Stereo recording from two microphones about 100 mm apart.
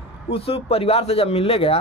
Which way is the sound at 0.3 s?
75° left (ahead or behind).